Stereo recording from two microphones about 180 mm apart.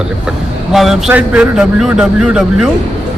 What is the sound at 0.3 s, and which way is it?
Speech, centre (ahead or behind).